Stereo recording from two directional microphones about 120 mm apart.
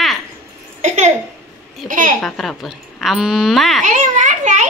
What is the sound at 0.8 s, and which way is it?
Speech, 70° right (ahead or behind).